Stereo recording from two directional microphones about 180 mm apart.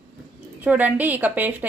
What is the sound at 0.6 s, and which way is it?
Speech, 10° right (ahead or behind).